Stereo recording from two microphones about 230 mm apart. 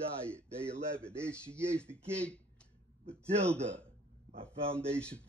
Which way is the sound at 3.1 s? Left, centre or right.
Centre.